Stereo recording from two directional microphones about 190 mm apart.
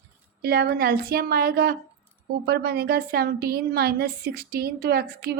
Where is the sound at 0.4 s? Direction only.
60° right (ahead or behind).